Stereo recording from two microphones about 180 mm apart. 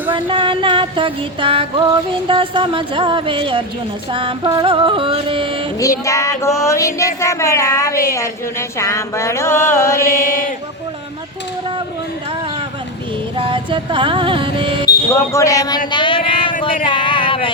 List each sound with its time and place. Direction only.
0.1 s music: 30° right (ahead or behind)
5.8 s child singing: 15° left (ahead or behind)
13.3 s music: 30° right (ahead or behind)
15.1 s speech: 15° left (ahead or behind)